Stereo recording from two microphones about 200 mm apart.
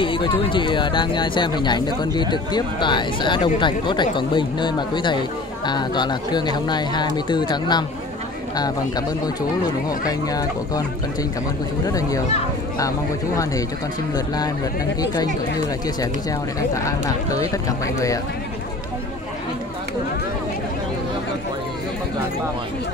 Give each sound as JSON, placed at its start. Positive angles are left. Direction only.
{"t": 0.0, "sound": "speech", "side_deg": 25}
{"t": 11.8, "sound": "speech", "side_deg": 15}
{"t": 14.1, "sound": "speech", "side_deg": 20}
{"t": 16.0, "sound": "speech", "side_deg": 15}